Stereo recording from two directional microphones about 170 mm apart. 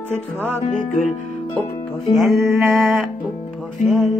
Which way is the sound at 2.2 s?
Centre (ahead or behind).